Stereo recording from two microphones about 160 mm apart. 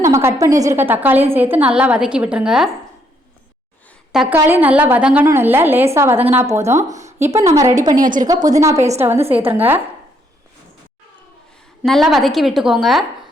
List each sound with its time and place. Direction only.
0.0 s a woman's voice: 15° right (ahead or behind)
4.1 s a woman's voice: 5° right (ahead or behind); by 7.9 s 20° right (ahead or behind)
7.9 s a woman's voice: 55° right (ahead or behind)
8.3 s a woman's voice: 20° right (ahead or behind)
11.8 s a woman's voice: centre (ahead or behind)